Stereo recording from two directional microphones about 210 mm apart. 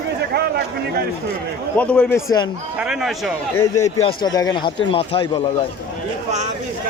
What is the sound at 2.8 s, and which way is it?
Speech, centre (ahead or behind).